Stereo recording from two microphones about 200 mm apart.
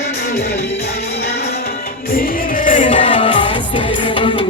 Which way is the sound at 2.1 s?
40° left (ahead or behind).